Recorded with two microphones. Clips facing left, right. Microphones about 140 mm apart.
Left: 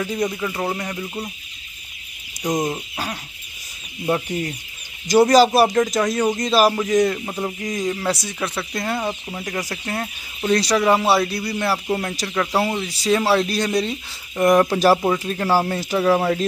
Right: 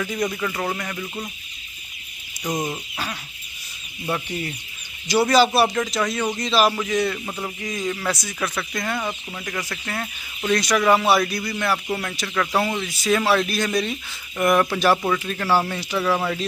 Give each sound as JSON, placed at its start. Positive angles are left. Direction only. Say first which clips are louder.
{"t": 0.0, "sound": "speech", "louder": "left 2 dB", "side_deg": 30}
{"t": 2.4, "sound": "speech", "louder": "left 4 dB", "side_deg": 20}
{"t": 5.0, "sound": "speech", "louder": "left 4 dB", "side_deg": 40}
{"t": 7.2, "sound": "speech", "louder": "left 4 dB", "side_deg": 20}
{"t": 8.1, "sound": "speech", "louder": "left 2 dB", "side_deg": 30}
{"t": 15.7, "sound": "speech", "louder": "left 5 dB", "side_deg": 40}